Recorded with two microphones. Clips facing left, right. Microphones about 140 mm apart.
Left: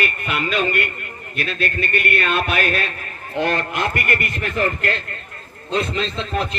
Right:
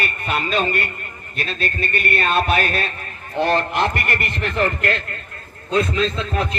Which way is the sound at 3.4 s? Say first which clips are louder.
Right 3 dB; 50° left (ahead or behind).